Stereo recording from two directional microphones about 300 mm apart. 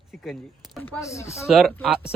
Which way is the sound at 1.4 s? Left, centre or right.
Centre.